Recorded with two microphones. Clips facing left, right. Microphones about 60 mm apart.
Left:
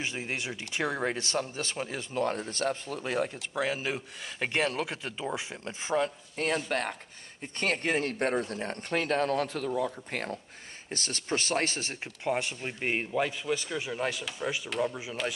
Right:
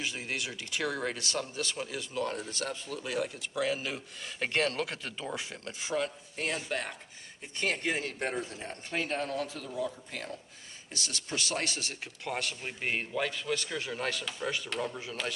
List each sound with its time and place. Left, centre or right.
0.0 s speech: left
3.5 s speech: left
4.4 s a man's voice: centre
6.3 s a man's voice: left
12.3 s a man's voice: centre